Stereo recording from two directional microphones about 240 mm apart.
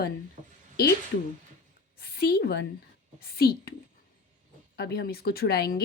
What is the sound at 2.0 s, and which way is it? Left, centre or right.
Speech, left.